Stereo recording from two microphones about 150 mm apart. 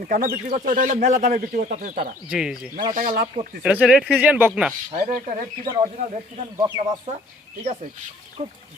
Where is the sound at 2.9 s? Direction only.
65° right (ahead or behind).